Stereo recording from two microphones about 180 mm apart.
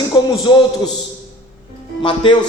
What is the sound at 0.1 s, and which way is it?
Music, 25° left (ahead or behind).